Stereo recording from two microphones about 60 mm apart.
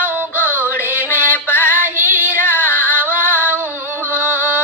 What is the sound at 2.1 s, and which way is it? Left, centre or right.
Female singing, left.